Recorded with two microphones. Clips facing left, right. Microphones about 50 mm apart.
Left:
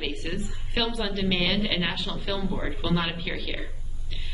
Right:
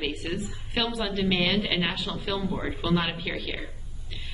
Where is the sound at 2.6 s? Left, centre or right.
Centre.